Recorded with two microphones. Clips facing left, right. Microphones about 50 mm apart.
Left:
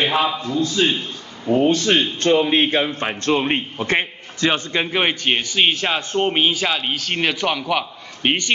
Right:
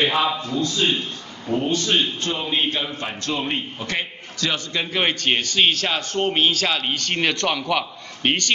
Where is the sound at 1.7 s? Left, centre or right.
Left.